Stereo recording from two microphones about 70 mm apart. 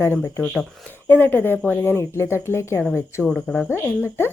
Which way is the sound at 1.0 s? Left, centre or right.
Left.